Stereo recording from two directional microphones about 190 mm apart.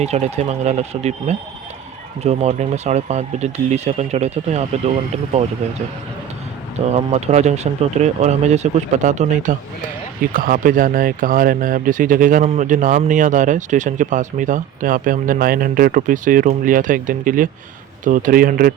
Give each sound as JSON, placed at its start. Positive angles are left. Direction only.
{"t": 0.0, "sound": "speech", "side_deg": -35}
{"t": 6.9, "sound": "speech", "side_deg": -35}